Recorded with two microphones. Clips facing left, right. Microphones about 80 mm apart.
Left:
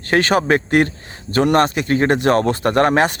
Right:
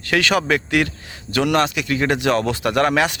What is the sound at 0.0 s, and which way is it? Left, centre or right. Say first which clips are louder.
Speech: left 3 dB; left.